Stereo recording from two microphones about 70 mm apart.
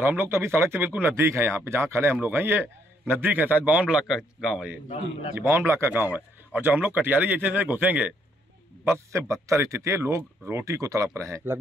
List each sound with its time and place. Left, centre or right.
0.0 s speech: right
4.1 s speech: centre
5.4 s speech: right
8.8 s speech: right